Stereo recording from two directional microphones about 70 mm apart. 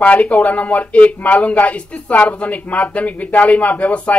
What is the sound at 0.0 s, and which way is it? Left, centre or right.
Speech, centre.